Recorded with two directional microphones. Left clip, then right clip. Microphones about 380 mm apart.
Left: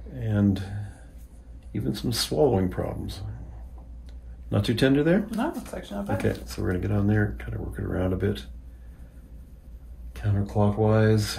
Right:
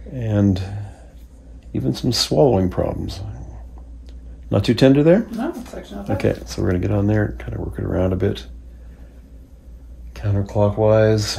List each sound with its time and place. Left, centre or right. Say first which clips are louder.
0.2 s a sound: right 7 dB; centre
1.7 s speech: right 8 dB; centre
4.5 s speech: right 8 dB; centre
10.1 s speech: right 7 dB; centre